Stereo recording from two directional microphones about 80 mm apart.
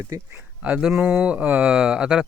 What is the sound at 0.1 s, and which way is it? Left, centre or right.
Speech, right.